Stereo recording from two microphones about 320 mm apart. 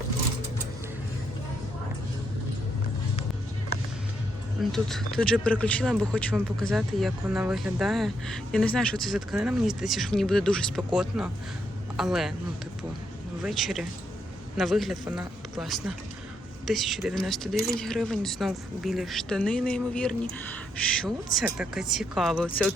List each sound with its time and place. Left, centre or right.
4.6 s speech: centre
13.4 s speech: centre
15.0 s speech: centre
15.5 s speech: centre